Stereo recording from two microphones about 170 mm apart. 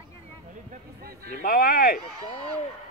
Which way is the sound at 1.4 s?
60° left (ahead or behind).